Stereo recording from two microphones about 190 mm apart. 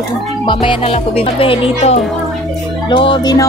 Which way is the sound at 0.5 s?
25° left (ahead or behind).